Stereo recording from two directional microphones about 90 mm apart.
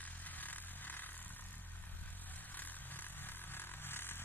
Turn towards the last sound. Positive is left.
turn(degrees=25)  # may be behind; listen again after turning